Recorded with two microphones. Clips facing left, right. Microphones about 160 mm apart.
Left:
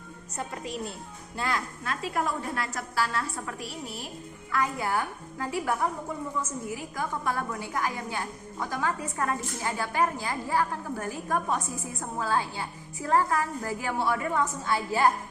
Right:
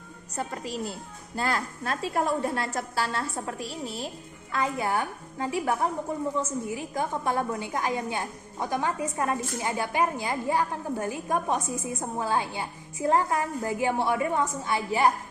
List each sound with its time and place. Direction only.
0.3 s a woman's voice: 35° right (ahead or behind); by 15.1 s 20° right (ahead or behind)